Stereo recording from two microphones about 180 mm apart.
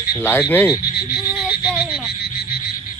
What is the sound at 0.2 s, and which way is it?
Speech, 10° left (ahead or behind).